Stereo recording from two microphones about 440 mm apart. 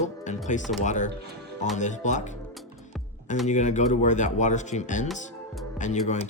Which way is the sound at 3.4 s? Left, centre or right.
Centre.